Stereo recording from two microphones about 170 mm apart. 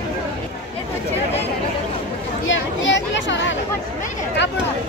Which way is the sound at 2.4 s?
90° left.